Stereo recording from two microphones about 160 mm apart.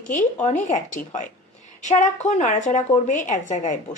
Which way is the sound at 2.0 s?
45° left (ahead or behind).